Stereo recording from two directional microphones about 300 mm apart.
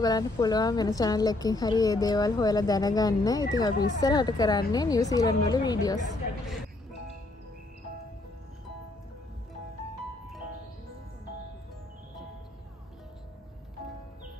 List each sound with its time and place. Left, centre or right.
0.0 s a woman's voice: centre